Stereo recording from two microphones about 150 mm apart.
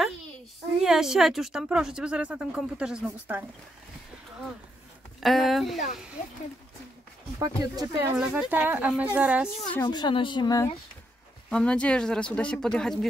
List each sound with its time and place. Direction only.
0.7 s speech: 5° right (ahead or behind)
5.2 s speech: centre (ahead or behind)
7.3 s speech: 25° right (ahead or behind)
8.2 s speech: 5° right (ahead or behind)
9.8 s speech: 30° left (ahead or behind)
11.5 s speech: 5° left (ahead or behind)